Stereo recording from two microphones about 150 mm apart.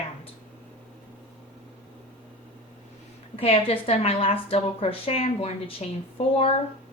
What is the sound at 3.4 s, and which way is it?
A woman's voice, 40° left (ahead or behind).